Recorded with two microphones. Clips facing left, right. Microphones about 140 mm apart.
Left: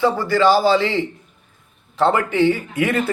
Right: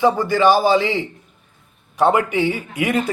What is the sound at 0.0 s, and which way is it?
A man's voice, 15° right (ahead or behind).